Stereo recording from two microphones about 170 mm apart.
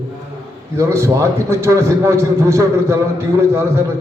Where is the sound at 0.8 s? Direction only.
15° right (ahead or behind).